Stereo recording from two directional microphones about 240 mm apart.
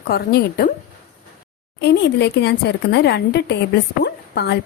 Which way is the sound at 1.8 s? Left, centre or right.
Left.